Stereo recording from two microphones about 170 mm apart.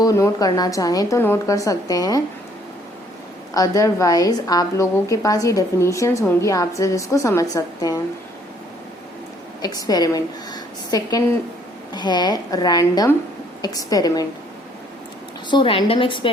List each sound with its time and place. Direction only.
0.0 s a woman's voice: 20° left (ahead or behind)
3.5 s a woman's voice: 20° left (ahead or behind)
9.6 s a woman's voice: 20° left (ahead or behind)
15.4 s a woman's voice: 30° left (ahead or behind)